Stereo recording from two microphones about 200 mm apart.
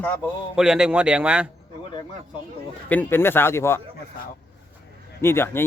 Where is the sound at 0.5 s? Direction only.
5° right (ahead or behind).